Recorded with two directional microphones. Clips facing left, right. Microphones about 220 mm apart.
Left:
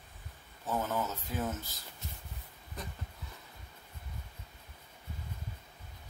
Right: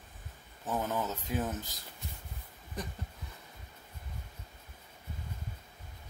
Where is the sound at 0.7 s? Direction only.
15° right (ahead or behind).